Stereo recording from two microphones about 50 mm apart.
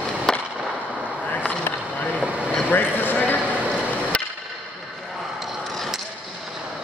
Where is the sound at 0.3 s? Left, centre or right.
Centre.